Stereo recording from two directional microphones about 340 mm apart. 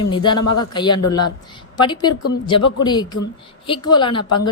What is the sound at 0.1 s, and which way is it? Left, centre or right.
Speech, centre.